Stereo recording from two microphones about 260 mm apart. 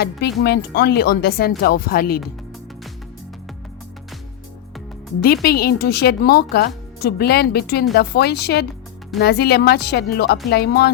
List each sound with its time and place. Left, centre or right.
0.0 s speech: left
5.2 s speech: left